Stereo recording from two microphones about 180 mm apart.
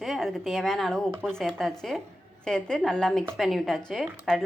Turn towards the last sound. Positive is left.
turn(degrees=0)  # may be behind; listen again after turning